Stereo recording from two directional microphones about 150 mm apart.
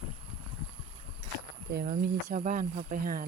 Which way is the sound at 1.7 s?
65° right (ahead or behind).